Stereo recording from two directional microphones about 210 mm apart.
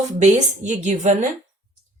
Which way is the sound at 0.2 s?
35° right (ahead or behind).